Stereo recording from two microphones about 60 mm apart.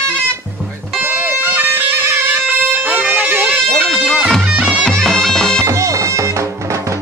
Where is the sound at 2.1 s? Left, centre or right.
Right.